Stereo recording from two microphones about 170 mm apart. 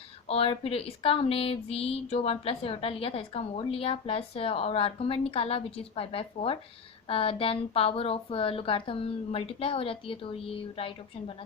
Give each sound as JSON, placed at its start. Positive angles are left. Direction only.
{"t": 0.3, "sound": "speech", "side_deg": 35}